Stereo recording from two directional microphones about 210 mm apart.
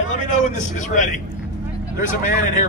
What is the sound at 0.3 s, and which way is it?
Speech, 35° left (ahead or behind).